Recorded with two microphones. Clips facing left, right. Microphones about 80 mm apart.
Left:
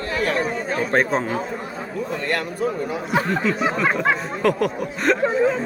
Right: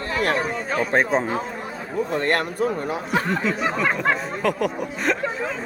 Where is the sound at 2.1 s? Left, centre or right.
Right.